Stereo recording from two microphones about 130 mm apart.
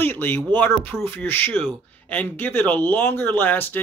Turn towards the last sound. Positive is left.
turn(degrees=15)  # may be behind; listen again after turning